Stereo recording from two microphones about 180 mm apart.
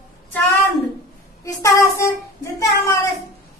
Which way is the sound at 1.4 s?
15° left (ahead or behind).